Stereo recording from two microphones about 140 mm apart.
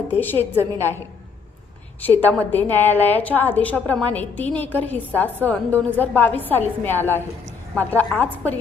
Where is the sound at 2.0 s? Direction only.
15° left (ahead or behind).